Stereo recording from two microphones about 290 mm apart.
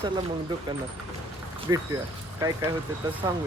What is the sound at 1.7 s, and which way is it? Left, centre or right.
Speech, centre.